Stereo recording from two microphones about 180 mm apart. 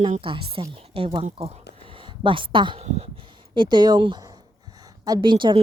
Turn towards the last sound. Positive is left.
turn(degrees=-25)  # may be behind; listen again after turning